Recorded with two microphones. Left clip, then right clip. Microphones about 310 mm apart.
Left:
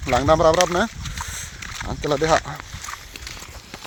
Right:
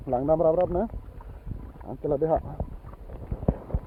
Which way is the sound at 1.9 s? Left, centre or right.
Left.